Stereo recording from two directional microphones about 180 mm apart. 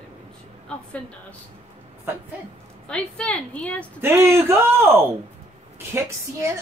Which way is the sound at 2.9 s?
5° left (ahead or behind).